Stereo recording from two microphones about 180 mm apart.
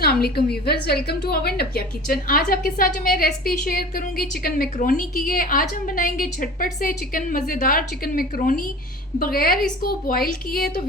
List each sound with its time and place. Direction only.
0.0 s a woman's voice: 60° left (ahead or behind)